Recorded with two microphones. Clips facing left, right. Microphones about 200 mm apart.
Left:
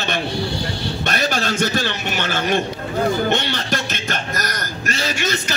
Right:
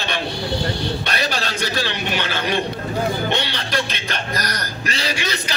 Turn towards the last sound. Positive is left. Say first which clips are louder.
# left 2 dB
turn(degrees=50)  # may be behind; listen again after turning